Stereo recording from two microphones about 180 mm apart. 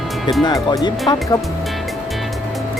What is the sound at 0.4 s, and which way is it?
Speech, 20° left (ahead or behind).